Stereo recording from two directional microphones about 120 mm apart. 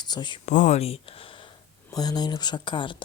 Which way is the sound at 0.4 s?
80° left.